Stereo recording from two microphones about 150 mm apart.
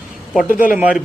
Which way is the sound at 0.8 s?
10° right (ahead or behind).